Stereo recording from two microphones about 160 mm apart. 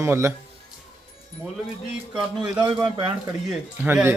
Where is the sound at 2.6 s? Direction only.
25° right (ahead or behind).